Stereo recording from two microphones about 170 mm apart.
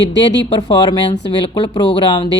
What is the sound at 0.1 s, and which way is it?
Speech, 90° left.